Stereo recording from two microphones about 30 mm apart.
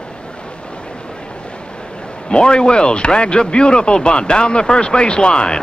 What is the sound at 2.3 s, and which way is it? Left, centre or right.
Speech, left.